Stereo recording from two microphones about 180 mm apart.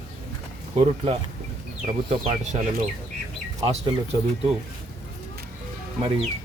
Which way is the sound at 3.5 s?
25° right (ahead or behind).